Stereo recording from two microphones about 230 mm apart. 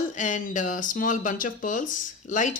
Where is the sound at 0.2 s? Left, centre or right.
Left.